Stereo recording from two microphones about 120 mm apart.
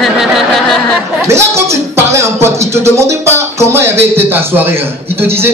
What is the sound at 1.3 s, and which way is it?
Music, 20° right (ahead or behind).